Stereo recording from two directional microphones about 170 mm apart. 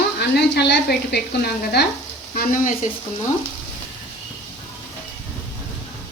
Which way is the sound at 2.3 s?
55° left (ahead or behind).